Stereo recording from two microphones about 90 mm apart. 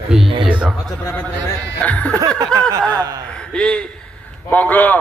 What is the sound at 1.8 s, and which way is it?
Speech, 15° left (ahead or behind).